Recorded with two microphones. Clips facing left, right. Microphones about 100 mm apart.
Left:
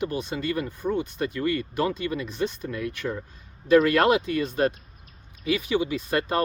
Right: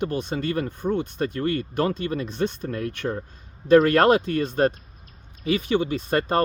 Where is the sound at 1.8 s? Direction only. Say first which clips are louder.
Right 2 dB; 40° right (ahead or behind).